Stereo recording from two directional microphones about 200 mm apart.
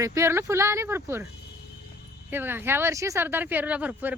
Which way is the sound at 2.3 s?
10° right (ahead or behind).